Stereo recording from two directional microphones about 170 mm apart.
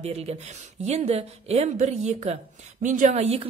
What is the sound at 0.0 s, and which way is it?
A woman's voice, 40° right (ahead or behind).